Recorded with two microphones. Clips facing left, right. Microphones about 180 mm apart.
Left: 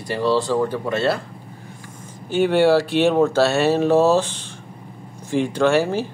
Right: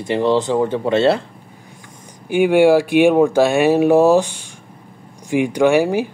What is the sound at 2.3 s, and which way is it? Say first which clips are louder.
Speech: right 4 dB; 10° right (ahead or behind).